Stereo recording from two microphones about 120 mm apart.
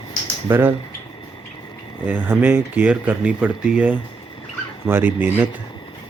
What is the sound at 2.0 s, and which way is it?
Speech, 15° right (ahead or behind).